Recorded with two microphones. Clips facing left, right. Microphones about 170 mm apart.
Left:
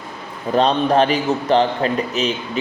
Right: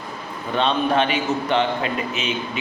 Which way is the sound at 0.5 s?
35° left (ahead or behind).